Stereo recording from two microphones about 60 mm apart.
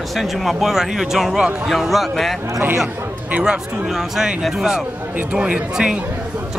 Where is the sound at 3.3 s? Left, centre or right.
Centre.